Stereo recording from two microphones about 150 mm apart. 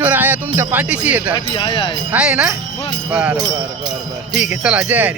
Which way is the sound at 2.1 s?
5° right (ahead or behind).